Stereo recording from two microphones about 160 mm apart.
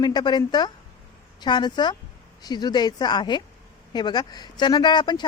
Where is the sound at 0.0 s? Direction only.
25° left (ahead or behind).